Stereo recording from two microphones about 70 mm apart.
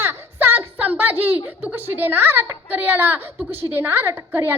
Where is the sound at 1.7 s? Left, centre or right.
Right.